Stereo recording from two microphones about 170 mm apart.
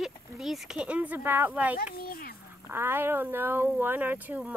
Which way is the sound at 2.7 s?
15° right (ahead or behind).